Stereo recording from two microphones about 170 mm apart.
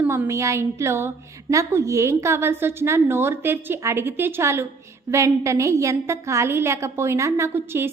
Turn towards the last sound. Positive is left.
turn(degrees=-15)  # may be behind; listen again after turning